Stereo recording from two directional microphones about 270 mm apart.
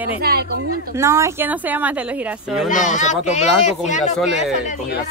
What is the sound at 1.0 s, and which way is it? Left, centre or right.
Speech, centre.